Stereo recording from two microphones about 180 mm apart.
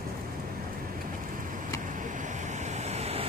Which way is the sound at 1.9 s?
45° right (ahead or behind).